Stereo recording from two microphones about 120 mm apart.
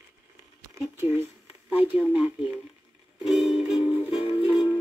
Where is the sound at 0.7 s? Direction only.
20° right (ahead or behind).